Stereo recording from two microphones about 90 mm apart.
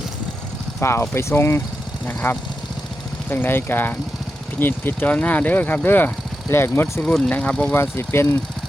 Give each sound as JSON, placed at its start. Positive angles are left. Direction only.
{"t": 0.8, "sound": "speech", "side_deg": 30}
{"t": 7.0, "sound": "speech", "side_deg": 10}
{"t": 7.7, "sound": "speech", "side_deg": 25}